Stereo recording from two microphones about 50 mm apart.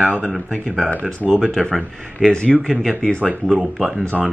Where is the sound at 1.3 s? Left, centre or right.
Centre.